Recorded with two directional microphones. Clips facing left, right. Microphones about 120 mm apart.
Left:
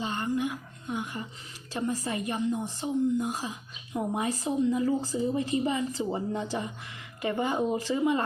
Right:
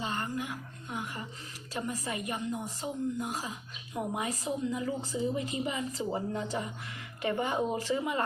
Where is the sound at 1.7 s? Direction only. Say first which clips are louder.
Left 5 dB; 30° left (ahead or behind).